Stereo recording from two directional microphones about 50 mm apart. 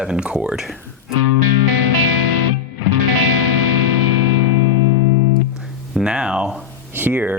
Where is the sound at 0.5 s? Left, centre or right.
Centre.